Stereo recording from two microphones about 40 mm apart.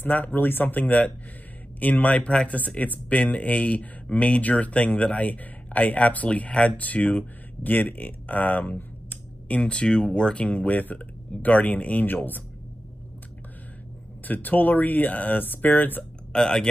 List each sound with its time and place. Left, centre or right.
0.0 s speech: left
9.6 s speech: left
14.2 s speech: left
16.3 s speech: centre